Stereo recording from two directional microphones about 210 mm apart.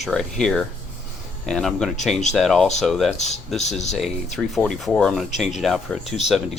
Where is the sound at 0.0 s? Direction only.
Centre (ahead or behind).